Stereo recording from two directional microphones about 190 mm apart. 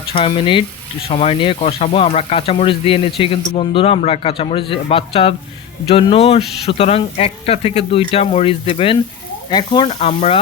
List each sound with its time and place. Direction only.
0.1 s a man's voice: 25° left (ahead or behind)